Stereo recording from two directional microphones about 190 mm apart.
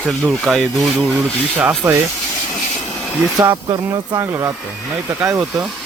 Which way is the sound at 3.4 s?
20° right (ahead or behind).